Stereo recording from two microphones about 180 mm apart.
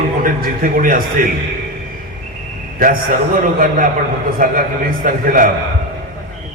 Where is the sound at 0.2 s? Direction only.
50° right (ahead or behind).